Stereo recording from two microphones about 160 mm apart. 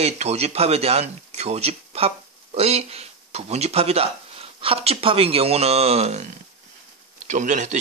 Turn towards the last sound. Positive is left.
turn(degrees=-50)  # may be behind; listen again after turning